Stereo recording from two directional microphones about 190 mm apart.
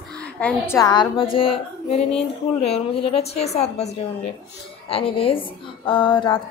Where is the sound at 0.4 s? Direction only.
5° left (ahead or behind).